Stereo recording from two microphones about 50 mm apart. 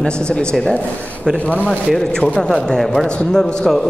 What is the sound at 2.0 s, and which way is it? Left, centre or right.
A man's voice, centre.